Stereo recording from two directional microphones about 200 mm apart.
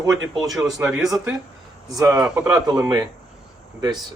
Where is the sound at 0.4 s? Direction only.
Centre (ahead or behind).